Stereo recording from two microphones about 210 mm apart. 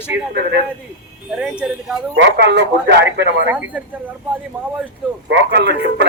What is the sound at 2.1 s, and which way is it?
Speech, 55° right (ahead or behind).